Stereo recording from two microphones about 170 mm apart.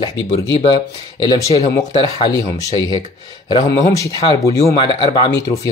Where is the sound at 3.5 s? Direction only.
25° left (ahead or behind).